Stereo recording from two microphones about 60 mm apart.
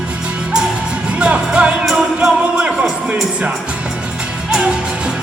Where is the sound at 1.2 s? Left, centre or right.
Right.